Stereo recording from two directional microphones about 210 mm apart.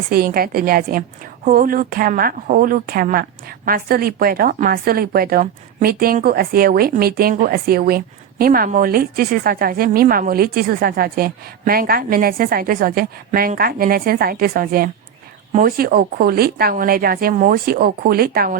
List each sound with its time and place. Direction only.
0.1 s speech: 45° right (ahead or behind)